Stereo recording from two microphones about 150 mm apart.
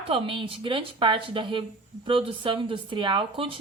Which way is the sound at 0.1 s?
35° right (ahead or behind).